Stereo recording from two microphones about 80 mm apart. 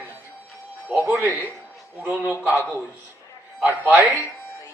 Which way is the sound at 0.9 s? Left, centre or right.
Centre.